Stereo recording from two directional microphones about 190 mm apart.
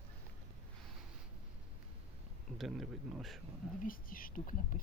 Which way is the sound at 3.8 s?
45° left (ahead or behind).